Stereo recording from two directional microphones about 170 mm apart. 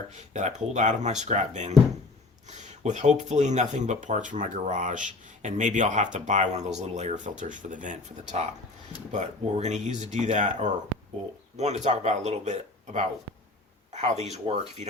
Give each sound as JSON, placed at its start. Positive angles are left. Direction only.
{"t": 0.1, "sound": "speech", "side_deg": -45}